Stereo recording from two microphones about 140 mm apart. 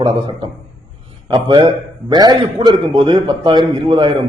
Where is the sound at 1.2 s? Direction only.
30° right (ahead or behind).